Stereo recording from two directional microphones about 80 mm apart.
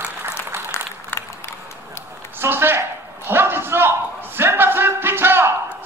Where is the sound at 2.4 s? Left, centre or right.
Right.